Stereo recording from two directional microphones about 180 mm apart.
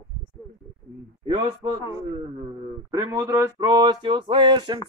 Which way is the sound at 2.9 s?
20° right (ahead or behind).